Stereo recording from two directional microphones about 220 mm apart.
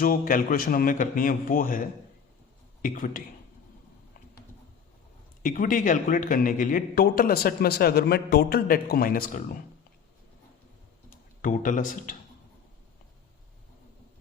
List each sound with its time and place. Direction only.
0.0 s a man's voice: 40° left (ahead or behind)
5.4 s a man's voice: 35° left (ahead or behind)
11.1 s speech: 35° left (ahead or behind)